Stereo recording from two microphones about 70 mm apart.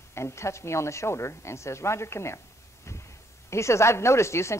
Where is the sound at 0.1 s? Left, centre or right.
Left.